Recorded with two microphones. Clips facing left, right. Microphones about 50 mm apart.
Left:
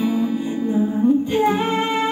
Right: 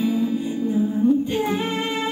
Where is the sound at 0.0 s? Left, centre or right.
Left.